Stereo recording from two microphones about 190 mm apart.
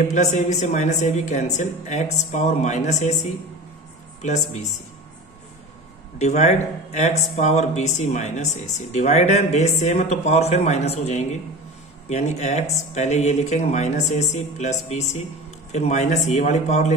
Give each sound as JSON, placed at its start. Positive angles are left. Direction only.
{"t": 0.1, "sound": "speech", "side_deg": 40}
{"t": 6.1, "sound": "speech", "side_deg": 35}